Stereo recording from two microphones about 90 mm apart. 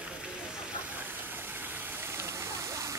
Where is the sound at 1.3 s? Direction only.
20° right (ahead or behind).